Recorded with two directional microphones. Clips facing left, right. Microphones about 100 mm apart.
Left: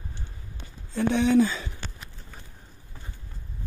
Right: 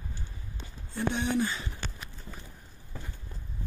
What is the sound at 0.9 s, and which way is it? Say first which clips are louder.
Speech: left 7 dB; 90° left.